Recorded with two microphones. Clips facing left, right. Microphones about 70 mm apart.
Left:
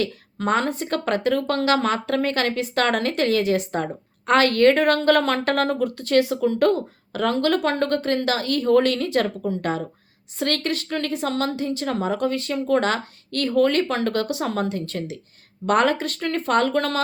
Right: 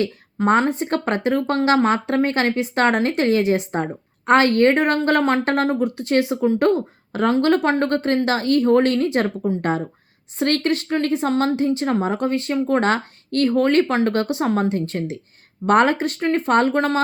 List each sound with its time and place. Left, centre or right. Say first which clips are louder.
0.0 s a woman's voice: right 4 dB; right